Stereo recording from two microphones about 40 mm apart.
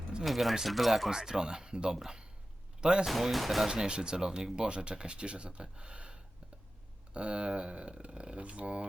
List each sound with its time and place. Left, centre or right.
0.3 s speech: centre
1.1 s speech: centre
3.1 s speech: centre
3.7 s speech: right